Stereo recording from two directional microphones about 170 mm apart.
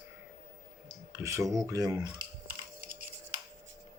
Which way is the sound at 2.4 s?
55° right (ahead or behind).